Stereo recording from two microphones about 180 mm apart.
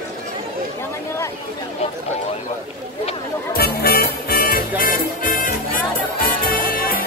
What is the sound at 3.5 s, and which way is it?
Music, 60° left (ahead or behind).